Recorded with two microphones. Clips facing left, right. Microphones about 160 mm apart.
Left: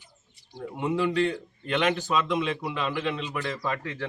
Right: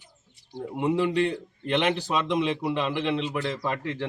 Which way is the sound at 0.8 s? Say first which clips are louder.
Right 1 dB; 25° right (ahead or behind).